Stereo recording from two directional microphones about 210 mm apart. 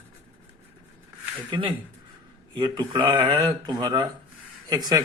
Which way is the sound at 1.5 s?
25° right (ahead or behind).